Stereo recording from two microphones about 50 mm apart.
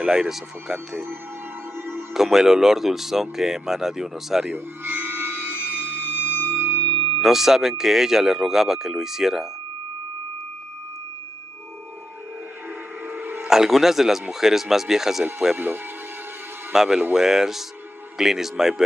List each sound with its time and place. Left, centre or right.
0.0 s speech: centre
2.1 s speech: centre
4.8 s a sound: right
7.2 s speech: centre
13.1 s a sound: right
13.5 s speech: centre
15.5 s speech: right
16.7 s speech: centre